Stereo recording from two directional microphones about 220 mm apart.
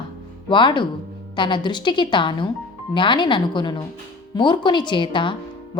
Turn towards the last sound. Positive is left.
turn(degrees=20)  # may be behind; listen again after turning